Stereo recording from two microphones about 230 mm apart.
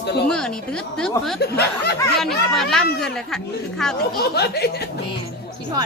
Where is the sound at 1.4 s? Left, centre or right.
Left.